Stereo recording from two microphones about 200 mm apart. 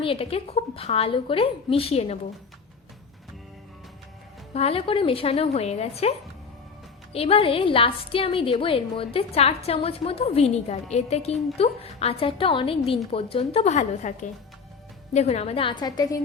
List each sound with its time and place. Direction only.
0.0 s a woman's voice: 30° left (ahead or behind)
4.5 s a woman's voice: 30° left (ahead or behind)